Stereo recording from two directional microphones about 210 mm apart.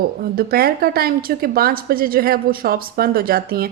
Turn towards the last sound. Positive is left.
turn(degrees=-45)  # may be behind; listen again after turning